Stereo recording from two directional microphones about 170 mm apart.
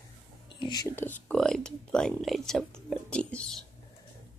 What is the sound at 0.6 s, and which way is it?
Speech, 25° left (ahead or behind).